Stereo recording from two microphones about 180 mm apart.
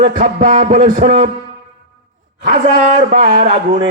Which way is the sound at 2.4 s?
50° right (ahead or behind).